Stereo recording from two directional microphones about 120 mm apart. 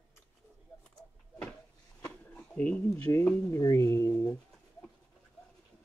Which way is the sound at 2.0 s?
10° left (ahead or behind).